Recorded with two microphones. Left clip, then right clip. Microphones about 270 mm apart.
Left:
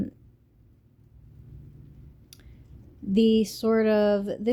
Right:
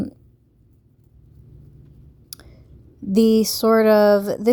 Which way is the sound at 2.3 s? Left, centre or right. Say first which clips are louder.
Right 12 dB; right.